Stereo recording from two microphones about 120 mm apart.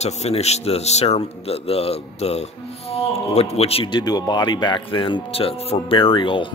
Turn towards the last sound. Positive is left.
turn(degrees=45)  # may be behind; listen again after turning